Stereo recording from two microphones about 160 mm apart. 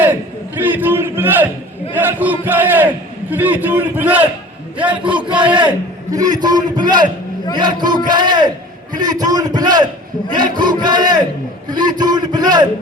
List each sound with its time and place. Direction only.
0.0 s a man's voice: 10° right (ahead or behind)
5.5 s a man's voice: 25° right (ahead or behind)